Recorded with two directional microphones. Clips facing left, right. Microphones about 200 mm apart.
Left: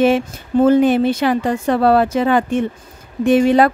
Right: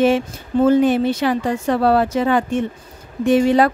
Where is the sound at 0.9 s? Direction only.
60° left (ahead or behind).